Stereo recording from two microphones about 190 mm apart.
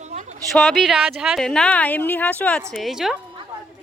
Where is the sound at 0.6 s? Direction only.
Centre (ahead or behind).